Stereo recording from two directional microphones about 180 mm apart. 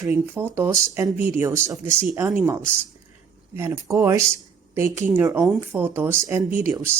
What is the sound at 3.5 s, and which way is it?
Speech, 15° right (ahead or behind).